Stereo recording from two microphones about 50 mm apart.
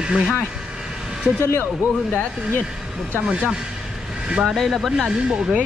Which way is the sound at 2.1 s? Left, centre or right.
Left.